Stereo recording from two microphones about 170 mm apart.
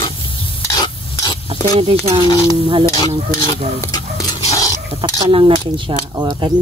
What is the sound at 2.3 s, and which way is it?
Speech, 20° left (ahead or behind).